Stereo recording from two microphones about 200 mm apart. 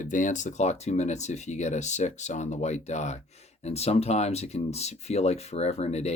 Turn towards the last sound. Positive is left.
turn(degrees=30)  # may be behind; listen again after turning